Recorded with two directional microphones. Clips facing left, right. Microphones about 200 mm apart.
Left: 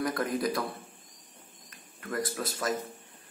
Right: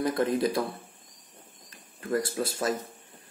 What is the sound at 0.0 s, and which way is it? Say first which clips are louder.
Speech: right 4 dB; 25° right (ahead or behind).